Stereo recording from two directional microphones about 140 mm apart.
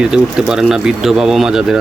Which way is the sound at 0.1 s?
5° right (ahead or behind).